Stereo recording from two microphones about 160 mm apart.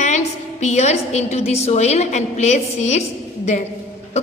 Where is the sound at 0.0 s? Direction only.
45° left (ahead or behind).